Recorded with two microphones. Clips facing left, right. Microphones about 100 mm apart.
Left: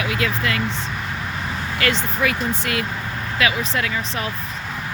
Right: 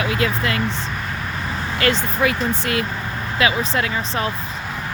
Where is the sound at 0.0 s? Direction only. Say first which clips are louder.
Right 2 dB; 30° right (ahead or behind).